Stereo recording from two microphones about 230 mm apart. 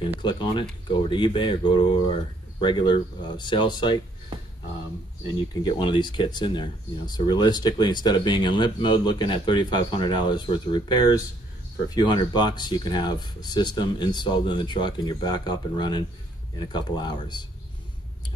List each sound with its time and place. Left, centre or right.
0.2 s speech: left
5.5 s speech: centre